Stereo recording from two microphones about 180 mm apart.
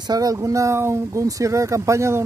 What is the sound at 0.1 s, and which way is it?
Speech, 20° right (ahead or behind).